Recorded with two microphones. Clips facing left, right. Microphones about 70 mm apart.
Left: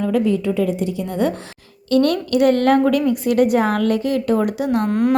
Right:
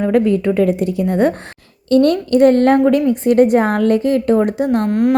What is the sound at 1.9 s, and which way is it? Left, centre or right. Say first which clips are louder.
A woman's voice: right 4 dB; right.